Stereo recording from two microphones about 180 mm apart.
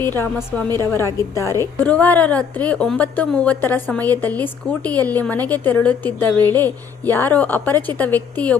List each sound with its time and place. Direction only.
0.0 s a woman's voice: 10° left (ahead or behind)